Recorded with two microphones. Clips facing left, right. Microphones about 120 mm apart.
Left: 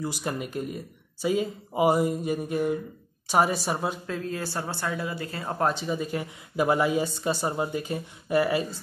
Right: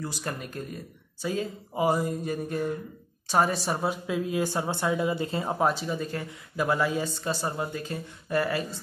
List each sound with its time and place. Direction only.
0.0 s a woman's voice: 10° left (ahead or behind); by 5.5 s 20° right (ahead or behind)
5.5 s speech: 5° right (ahead or behind)
5.9 s speech: 15° left (ahead or behind)